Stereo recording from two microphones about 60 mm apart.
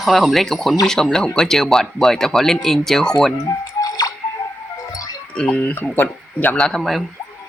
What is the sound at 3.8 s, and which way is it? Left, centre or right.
Music, left.